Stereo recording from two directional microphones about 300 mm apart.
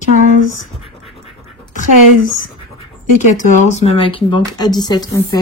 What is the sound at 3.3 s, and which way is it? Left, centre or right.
Speech, left.